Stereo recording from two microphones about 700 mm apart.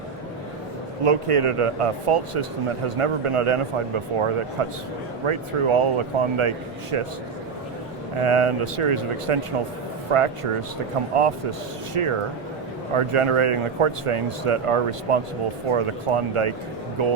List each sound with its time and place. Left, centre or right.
1.0 s speech: right
8.2 s speech: right